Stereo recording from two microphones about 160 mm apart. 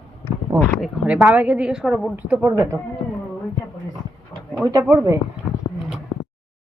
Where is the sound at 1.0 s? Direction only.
5° right (ahead or behind).